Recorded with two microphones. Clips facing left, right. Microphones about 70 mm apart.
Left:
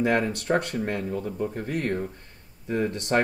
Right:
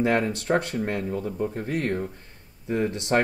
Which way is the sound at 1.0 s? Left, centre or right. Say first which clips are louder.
Right 1 dB; centre.